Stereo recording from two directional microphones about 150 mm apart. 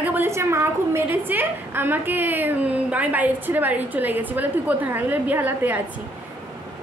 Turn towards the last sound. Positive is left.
turn(degrees=-10)  # may be behind; listen again after turning